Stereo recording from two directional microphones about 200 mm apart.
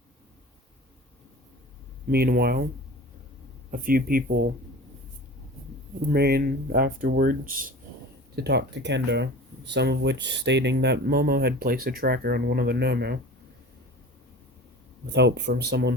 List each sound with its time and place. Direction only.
2.0 s speech: 50° right (ahead or behind)
3.7 s speech: 45° right (ahead or behind)
6.1 s speech: 50° right (ahead or behind)
15.1 s speech: 55° right (ahead or behind)